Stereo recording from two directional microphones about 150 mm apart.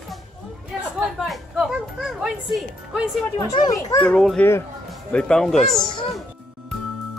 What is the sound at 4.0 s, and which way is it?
A woman's voice, 5° left (ahead or behind).